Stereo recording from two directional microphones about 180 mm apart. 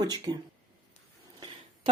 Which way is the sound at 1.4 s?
25° right (ahead or behind).